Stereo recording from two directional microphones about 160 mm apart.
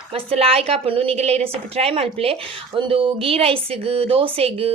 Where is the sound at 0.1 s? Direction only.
40° right (ahead or behind).